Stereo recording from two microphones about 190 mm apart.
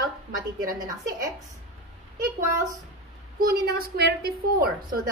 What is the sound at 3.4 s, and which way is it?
A woman's voice, 55° right (ahead or behind).